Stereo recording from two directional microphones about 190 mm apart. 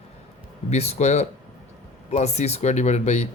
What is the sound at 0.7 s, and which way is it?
Speech, 35° left (ahead or behind).